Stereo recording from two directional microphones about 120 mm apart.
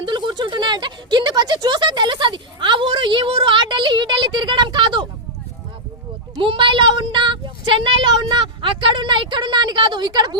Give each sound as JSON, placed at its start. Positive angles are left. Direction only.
{"t": 0.0, "sound": "speech", "side_deg": -40}
{"t": 6.3, "sound": "speech", "side_deg": -45}